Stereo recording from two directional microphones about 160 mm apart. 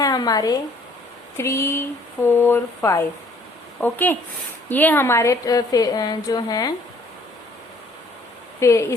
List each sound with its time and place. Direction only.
0.0 s a woman's voice: 25° left (ahead or behind)
8.6 s speech: 20° left (ahead or behind)